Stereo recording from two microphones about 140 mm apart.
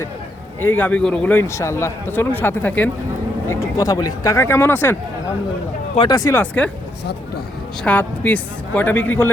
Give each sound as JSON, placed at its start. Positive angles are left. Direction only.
{"t": 0.6, "sound": "a man's voice", "side_deg": 10}
{"t": 3.5, "sound": "speech", "side_deg": 25}
{"t": 6.0, "sound": "speech", "side_deg": 25}
{"t": 7.9, "sound": "a man's voice", "side_deg": 10}